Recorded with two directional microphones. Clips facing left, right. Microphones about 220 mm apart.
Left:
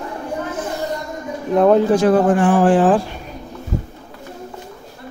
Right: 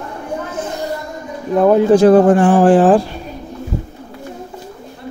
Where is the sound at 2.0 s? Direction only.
35° right (ahead or behind).